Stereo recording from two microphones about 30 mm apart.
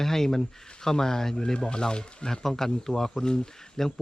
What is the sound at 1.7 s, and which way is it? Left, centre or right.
A man's voice, left.